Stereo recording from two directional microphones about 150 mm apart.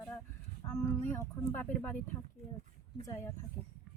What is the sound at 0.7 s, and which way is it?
Speech, 15° left (ahead or behind).